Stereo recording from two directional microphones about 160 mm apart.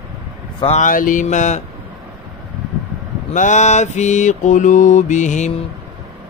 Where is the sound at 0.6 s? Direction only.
45° left (ahead or behind).